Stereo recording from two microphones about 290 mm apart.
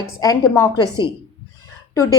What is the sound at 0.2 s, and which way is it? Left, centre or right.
Speech, centre.